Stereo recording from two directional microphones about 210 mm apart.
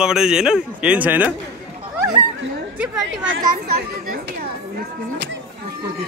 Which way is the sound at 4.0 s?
40° right (ahead or behind).